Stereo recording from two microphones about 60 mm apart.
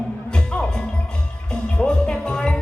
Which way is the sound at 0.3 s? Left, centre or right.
Centre.